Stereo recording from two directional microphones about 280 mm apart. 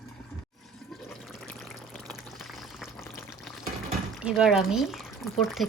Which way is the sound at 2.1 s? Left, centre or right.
Centre.